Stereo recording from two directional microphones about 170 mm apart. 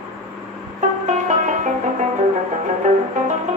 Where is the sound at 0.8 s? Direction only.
45° right (ahead or behind).